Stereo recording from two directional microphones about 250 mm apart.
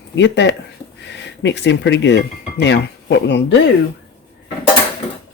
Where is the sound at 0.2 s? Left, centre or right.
Left.